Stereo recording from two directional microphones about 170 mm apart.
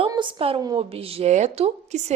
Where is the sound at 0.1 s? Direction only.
30° right (ahead or behind).